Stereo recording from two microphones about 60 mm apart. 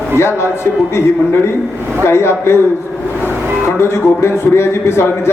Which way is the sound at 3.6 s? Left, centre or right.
Left.